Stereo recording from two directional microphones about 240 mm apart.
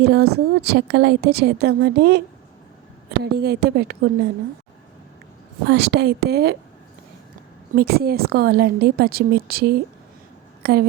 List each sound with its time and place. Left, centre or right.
0.0 s a woman's voice: right
5.6 s a woman's voice: right
7.8 s a woman's voice: right